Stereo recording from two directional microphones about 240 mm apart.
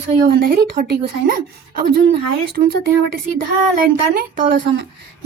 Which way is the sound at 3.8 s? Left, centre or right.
Right.